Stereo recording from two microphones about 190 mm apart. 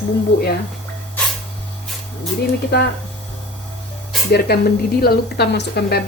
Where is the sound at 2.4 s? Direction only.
60° left (ahead or behind).